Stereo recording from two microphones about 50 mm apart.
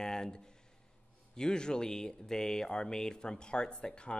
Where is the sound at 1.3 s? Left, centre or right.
Centre.